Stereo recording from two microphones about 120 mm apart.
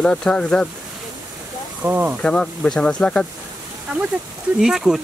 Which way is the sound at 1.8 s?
15° right (ahead or behind).